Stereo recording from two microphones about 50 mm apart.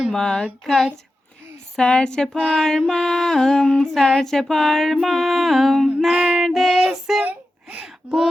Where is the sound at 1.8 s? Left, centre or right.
Centre.